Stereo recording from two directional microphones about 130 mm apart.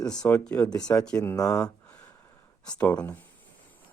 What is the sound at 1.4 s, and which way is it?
Speech, 25° left (ahead or behind).